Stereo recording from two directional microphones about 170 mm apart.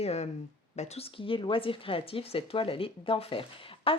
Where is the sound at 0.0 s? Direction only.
40° left (ahead or behind).